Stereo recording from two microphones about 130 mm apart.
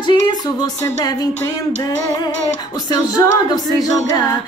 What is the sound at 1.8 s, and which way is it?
Music, 30° left (ahead or behind).